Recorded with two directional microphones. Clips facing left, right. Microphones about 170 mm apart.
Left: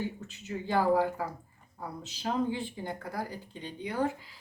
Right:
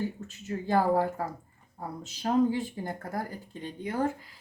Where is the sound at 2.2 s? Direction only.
40° right (ahead or behind).